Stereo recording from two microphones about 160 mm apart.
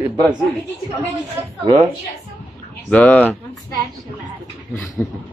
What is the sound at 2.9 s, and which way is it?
Speech, 10° left (ahead or behind).